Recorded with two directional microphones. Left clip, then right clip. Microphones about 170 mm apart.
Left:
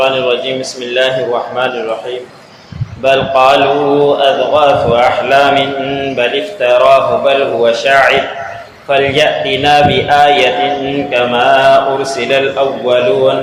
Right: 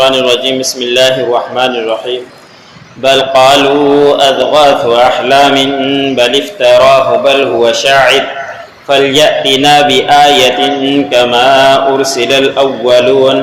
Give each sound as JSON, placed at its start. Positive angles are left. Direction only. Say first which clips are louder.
{"t": 0.0, "sound": "a man's voice", "louder": "right 4 dB", "side_deg": -30}
{"t": 3.0, "sound": "a man's voice", "louder": "right 3 dB", "side_deg": -30}